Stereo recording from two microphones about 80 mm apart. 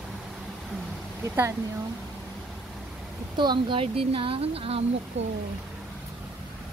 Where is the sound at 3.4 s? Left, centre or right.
Right.